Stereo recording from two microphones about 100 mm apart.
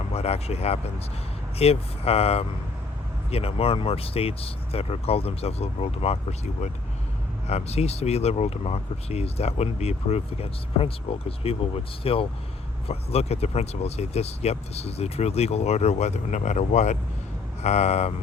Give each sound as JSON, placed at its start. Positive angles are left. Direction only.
{"t": 0.1, "sound": "speech", "side_deg": 90}
{"t": 12.9, "sound": "speech", "side_deg": 90}
{"t": 17.7, "sound": "speech", "side_deg": 90}